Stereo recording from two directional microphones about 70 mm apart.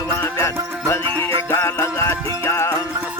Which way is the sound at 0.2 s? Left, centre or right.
Left.